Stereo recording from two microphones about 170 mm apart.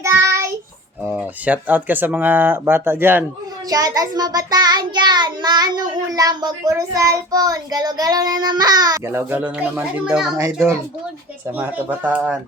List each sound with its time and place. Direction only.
0.0 s child singing: 15° right (ahead or behind)
1.0 s speech: 10° right (ahead or behind)
3.7 s child singing: 20° right (ahead or behind); by 10.3 s 5° right (ahead or behind)
10.3 s speech: 15° right (ahead or behind)